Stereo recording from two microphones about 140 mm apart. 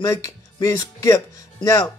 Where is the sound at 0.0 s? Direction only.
25° left (ahead or behind).